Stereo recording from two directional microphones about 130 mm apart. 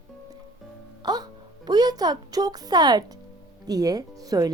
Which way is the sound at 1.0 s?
30° right (ahead or behind).